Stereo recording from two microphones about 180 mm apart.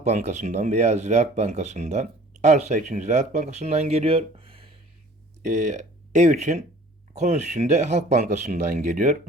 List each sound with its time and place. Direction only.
0.0 s speech: 40° right (ahead or behind)
5.4 s speech: 40° right (ahead or behind)